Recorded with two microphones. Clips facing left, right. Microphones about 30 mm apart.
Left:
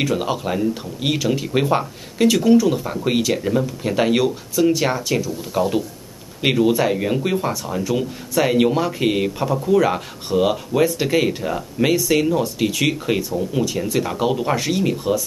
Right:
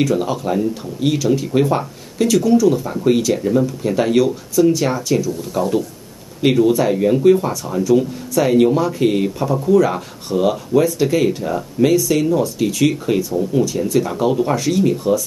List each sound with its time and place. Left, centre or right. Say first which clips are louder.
0.0 s speech: right 3 dB; centre